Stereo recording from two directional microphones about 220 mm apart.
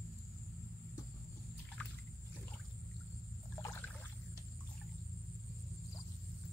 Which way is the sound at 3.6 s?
15° left (ahead or behind).